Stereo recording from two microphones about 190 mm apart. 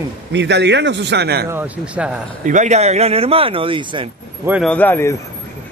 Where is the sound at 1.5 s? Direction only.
10° right (ahead or behind).